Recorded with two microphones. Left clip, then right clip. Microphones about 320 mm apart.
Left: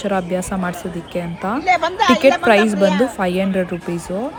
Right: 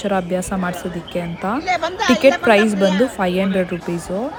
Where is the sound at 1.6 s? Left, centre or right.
Left.